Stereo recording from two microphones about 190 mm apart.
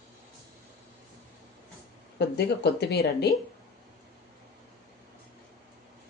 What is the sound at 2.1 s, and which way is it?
Speech, 60° left (ahead or behind).